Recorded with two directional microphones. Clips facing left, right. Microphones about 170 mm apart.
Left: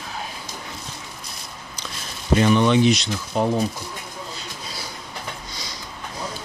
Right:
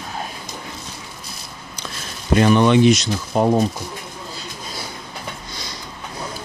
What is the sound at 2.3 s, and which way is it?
Speech, 55° right (ahead or behind).